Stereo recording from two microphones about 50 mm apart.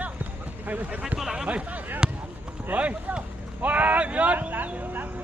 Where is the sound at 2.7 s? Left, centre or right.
Right.